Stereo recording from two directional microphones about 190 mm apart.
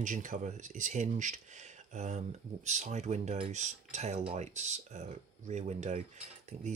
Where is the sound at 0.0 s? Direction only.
40° right (ahead or behind).